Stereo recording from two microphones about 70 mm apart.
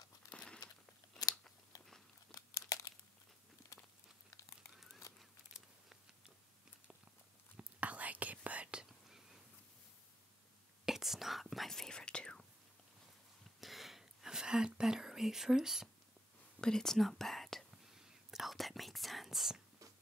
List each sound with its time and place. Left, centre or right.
0.3 s crumpling: centre
1.7 s biting: left
2.3 s crumpling: left
5.5 s a sound: centre
7.5 s whispering: centre
10.9 s whispering: centre
13.6 s whispering: centre
16.6 s whispering: centre